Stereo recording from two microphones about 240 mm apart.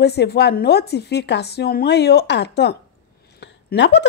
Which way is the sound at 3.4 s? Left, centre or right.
Left.